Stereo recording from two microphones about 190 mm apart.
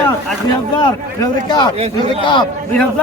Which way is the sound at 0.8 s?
20° left (ahead or behind).